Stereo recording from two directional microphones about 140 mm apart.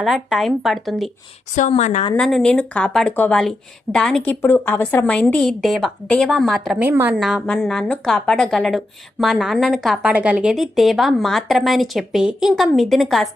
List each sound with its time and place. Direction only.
0.0 s speech: centre (ahead or behind)
1.5 s a woman's voice: 60° left (ahead or behind)
2.1 s speech: 5° left (ahead or behind)
4.4 s speech: 15° left (ahead or behind)
6.8 s a woman's voice: 15° right (ahead or behind)
7.2 s speech: centre (ahead or behind)